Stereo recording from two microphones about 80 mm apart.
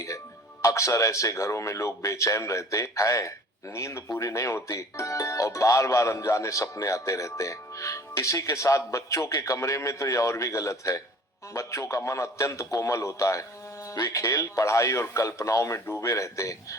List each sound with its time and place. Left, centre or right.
0.6 s speech: left
13.9 s speech: left
14.2 s speech: left